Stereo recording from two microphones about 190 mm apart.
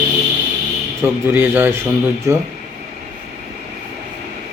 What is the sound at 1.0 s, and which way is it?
Speech, 10° right (ahead or behind).